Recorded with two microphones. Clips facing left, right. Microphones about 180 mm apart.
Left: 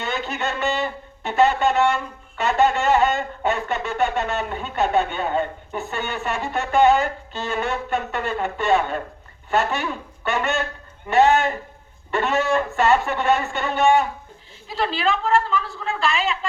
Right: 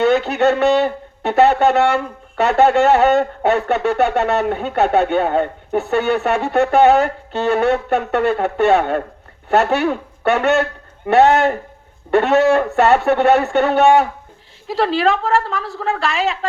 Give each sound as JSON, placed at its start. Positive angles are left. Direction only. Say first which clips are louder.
{"t": 0.0, "sound": "speech", "louder": "right 12 dB", "side_deg": -75}